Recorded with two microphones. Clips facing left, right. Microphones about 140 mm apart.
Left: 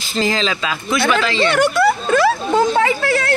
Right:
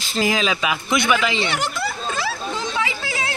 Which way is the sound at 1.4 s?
60° left (ahead or behind).